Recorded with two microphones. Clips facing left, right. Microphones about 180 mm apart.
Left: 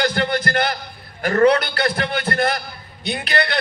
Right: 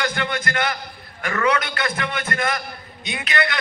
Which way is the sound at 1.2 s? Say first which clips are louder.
Left 7 dB; 45° left (ahead or behind).